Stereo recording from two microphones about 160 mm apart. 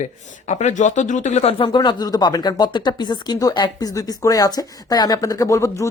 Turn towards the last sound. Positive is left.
turn(degrees=20)  # may be behind; listen again after turning